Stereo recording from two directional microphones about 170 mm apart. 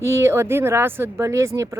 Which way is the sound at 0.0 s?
15° right (ahead or behind).